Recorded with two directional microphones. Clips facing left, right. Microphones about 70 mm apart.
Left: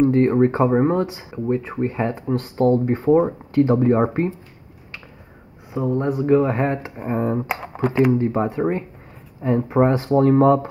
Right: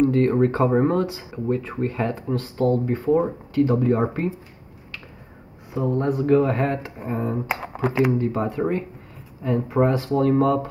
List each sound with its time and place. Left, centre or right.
0.0 s speech: left
2.5 s speech: left
5.7 s speech: centre
7.5 s speech: centre
8.2 s speech: left